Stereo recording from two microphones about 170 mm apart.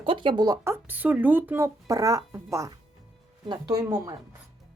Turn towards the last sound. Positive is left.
turn(degrees=-15)  # may be behind; listen again after turning